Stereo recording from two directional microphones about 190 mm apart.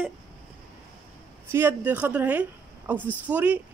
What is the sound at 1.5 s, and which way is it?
A woman's voice, 10° right (ahead or behind).